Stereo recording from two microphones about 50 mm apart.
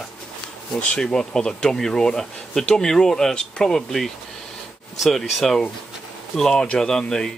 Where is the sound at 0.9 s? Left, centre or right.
Centre.